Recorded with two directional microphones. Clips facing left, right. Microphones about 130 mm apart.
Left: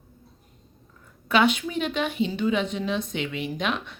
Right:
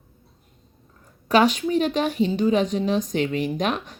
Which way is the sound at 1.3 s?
40° right (ahead or behind).